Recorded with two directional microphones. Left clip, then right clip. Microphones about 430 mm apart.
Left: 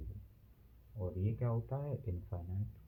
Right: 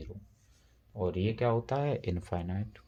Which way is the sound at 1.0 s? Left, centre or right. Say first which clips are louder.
Right 12 dB; right.